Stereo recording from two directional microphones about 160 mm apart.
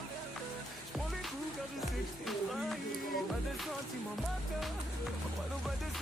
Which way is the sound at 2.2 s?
Centre (ahead or behind).